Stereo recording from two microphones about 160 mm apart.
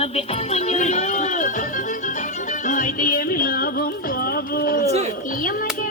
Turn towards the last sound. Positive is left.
turn(degrees=70)  # may be behind; listen again after turning